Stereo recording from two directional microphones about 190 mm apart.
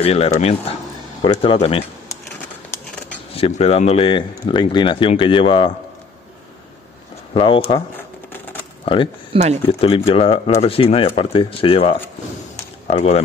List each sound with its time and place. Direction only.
0.0 s speech: 30° left (ahead or behind)
3.3 s speech: 30° left (ahead or behind)
7.3 s speech: 30° left (ahead or behind)
8.8 s speech: 25° left (ahead or behind)
9.3 s speech: 35° right (ahead or behind)
9.7 s speech: 30° left (ahead or behind)